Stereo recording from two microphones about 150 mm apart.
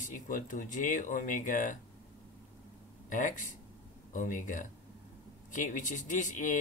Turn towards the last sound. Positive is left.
turn(degrees=60)  # may be behind; listen again after turning